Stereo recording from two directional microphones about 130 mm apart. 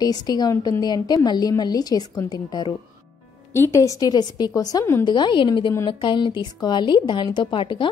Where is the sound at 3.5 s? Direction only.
20° left (ahead or behind).